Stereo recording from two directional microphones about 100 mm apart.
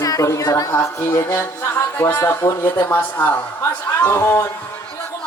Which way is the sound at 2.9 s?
15° left (ahead or behind).